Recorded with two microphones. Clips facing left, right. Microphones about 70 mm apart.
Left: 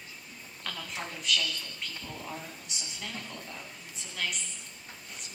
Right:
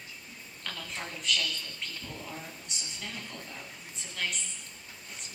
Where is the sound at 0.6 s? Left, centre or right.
Centre.